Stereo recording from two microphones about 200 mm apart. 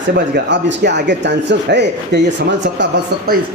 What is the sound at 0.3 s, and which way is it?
Speech, 60° right (ahead or behind).